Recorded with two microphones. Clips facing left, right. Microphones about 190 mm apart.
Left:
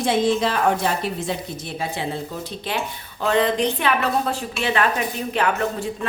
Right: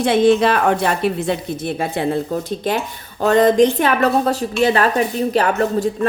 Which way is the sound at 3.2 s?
45° right (ahead or behind).